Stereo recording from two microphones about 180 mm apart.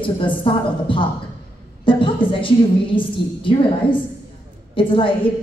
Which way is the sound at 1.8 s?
30° left (ahead or behind).